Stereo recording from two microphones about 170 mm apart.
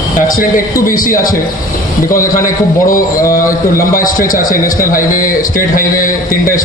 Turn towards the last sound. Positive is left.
turn(degrees=55)  # may be behind; listen again after turning